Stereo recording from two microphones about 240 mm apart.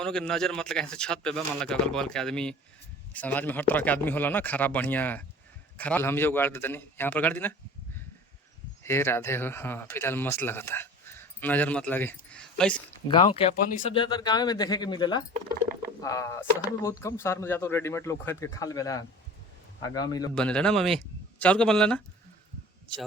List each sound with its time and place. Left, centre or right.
0.0 s speech: centre
8.8 s speech: centre
13.1 s speech: left
14.0 s speech: centre
20.3 s speech: centre